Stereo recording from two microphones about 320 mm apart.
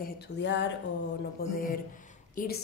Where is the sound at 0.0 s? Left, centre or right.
Left.